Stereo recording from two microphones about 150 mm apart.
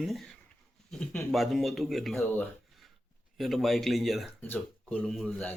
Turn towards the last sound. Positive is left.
turn(degrees=10)  # may be behind; listen again after turning